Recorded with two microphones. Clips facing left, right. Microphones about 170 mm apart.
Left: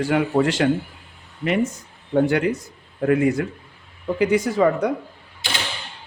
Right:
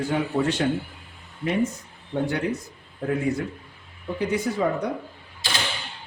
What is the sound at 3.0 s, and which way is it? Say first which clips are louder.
Speech: left 6 dB; 80° left.